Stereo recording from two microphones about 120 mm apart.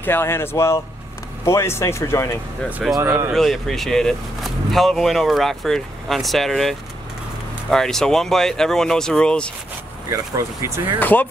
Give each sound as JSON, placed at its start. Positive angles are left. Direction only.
{"t": 0.0, "sound": "speech", "side_deg": 20}
{"t": 2.6, "sound": "speech", "side_deg": 0}
{"t": 10.0, "sound": "speech", "side_deg": -25}
{"t": 11.0, "sound": "speech", "side_deg": 15}